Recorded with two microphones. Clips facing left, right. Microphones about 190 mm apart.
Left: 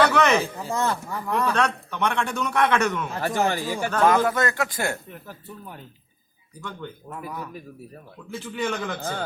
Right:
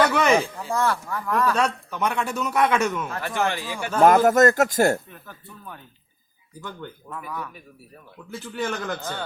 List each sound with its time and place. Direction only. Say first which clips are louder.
0.0 s a sound: even; 10° right (ahead or behind)
0.7 s speech: right 2 dB; 20° left (ahead or behind)
1.5 s a man's voice: even; 5° right (ahead or behind)
3.2 s speech: left 4 dB; 40° left (ahead or behind)
4.0 s a man's voice: right 6 dB; 45° right (ahead or behind)
7.2 s speech: right 1 dB; 35° left (ahead or behind)
8.3 s a man's voice: left 1 dB; centre (ahead or behind)